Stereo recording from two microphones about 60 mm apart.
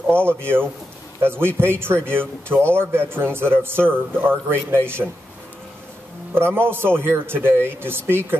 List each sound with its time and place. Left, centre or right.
0.1 s a man's voice: right
6.3 s speech: right